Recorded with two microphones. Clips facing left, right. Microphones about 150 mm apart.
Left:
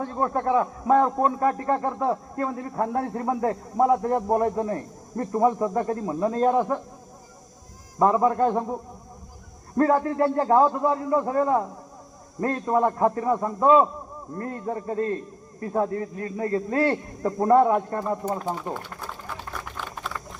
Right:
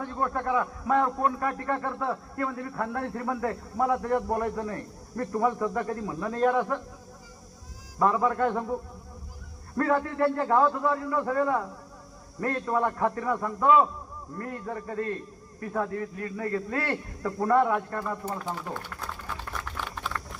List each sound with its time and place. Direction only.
0.0 s a man's voice: 25° left (ahead or behind)
7.9 s a man's voice: 25° left (ahead or behind)
9.9 s a man's voice: 30° left (ahead or behind)